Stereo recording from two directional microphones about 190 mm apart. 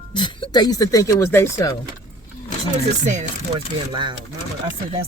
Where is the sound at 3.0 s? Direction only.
40° right (ahead or behind).